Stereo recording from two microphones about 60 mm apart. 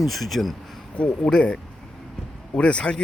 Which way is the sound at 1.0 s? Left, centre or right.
Centre.